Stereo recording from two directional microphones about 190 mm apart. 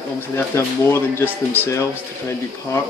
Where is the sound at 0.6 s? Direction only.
15° left (ahead or behind).